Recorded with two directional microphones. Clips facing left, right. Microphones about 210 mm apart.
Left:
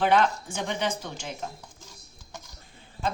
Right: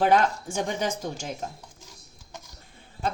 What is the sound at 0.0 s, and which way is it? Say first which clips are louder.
Speech: right 1 dB; 45° right (ahead or behind).